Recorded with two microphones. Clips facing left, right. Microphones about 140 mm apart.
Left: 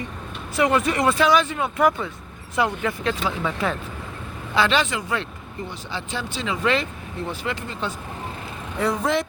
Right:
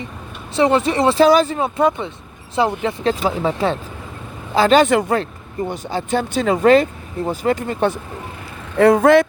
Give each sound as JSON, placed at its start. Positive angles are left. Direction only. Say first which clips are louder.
{"t": 0.5, "sound": "speech", "louder": "right 5 dB", "side_deg": -30}